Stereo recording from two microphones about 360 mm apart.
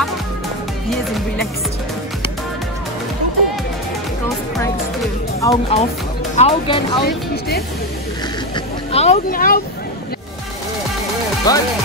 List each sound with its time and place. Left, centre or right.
0.8 s music: centre
5.4 s speech: centre
8.5 s vehicle: centre
11.5 s speech: centre